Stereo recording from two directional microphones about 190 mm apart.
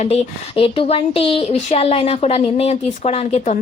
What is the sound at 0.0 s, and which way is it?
Speech, 30° left (ahead or behind).